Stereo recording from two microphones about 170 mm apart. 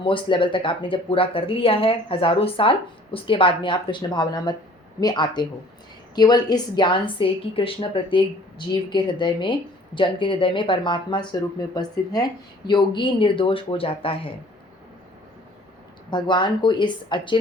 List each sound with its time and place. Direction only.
0.0 s speech: 30° left (ahead or behind)
16.0 s speech: 25° left (ahead or behind)